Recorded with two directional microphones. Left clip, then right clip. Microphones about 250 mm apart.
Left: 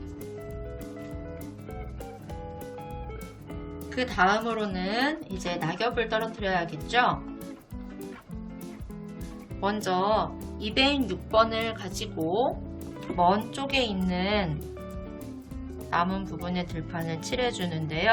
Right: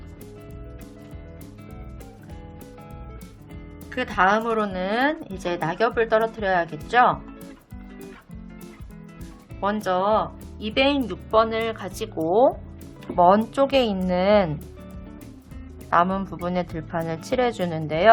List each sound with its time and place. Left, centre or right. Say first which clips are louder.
3.9 s speech: right 4 dB; centre
9.6 s speech: right 4 dB; centre
15.9 s speech: right 7 dB; centre